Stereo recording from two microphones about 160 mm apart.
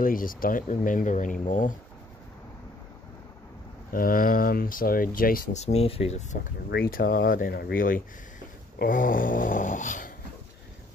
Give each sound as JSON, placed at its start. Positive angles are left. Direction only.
{"t": 0.0, "sound": "speech", "side_deg": 60}
{"t": 3.9, "sound": "speech", "side_deg": 60}
{"t": 5.6, "sound": "speech", "side_deg": 40}
{"t": 6.7, "sound": "speech", "side_deg": 70}